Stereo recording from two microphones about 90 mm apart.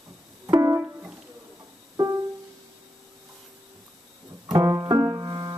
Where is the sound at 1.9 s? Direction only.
40° right (ahead or behind).